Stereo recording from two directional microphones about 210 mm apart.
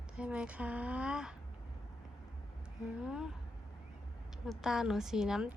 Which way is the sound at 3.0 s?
5° right (ahead or behind).